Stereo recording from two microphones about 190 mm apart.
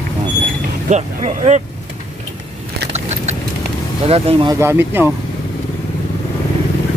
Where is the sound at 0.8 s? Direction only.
35° right (ahead or behind).